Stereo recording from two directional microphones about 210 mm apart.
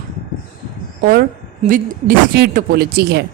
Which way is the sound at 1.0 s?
45° right (ahead or behind).